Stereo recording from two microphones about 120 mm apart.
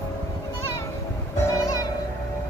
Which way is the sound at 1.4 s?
25° left (ahead or behind).